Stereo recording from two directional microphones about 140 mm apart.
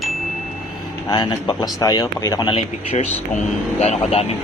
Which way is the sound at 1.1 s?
30° left (ahead or behind).